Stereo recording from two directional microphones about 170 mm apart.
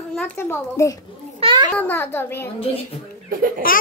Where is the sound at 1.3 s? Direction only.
30° right (ahead or behind).